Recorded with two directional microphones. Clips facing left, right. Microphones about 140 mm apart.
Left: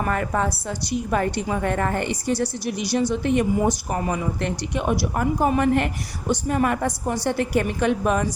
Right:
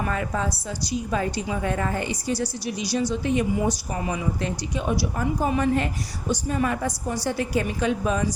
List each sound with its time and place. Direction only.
0.0 s a woman's voice: 55° left (ahead or behind)